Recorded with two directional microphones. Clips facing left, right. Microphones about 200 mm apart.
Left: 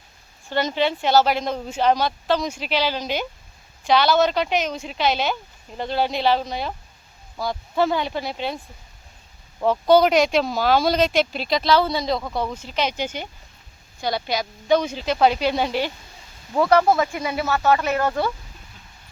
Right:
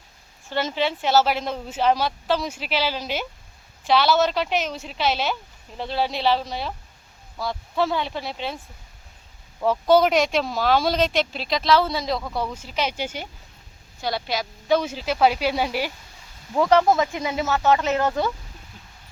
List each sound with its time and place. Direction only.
0.5 s speech: centre (ahead or behind)
9.6 s speech: 5° right (ahead or behind); by 18.3 s 20° right (ahead or behind)